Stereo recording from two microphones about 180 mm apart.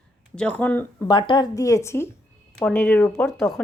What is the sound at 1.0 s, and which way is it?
A woman's voice, 25° left (ahead or behind).